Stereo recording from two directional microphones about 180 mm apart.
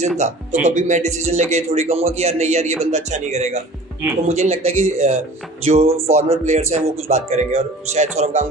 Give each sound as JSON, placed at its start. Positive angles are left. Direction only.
{"t": 0.2, "sound": "speech", "side_deg": -40}